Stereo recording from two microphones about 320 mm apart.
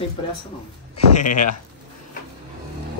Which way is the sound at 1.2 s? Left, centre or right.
Left.